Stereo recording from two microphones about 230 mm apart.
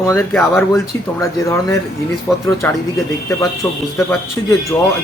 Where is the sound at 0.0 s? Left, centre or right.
Centre.